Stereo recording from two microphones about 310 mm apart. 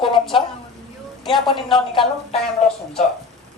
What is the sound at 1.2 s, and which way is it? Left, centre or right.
Speech, centre.